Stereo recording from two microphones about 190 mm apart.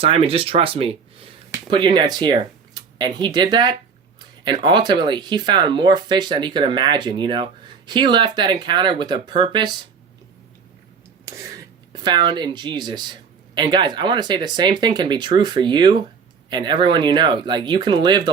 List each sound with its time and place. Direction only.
0.0 s speech: 30° right (ahead or behind)
11.3 s speech: 20° right (ahead or behind)